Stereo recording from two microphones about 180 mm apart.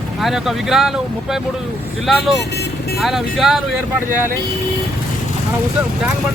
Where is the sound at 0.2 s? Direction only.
Centre (ahead or behind).